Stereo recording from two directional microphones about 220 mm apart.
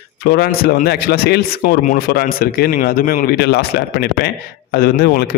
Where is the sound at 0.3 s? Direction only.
45° left (ahead or behind).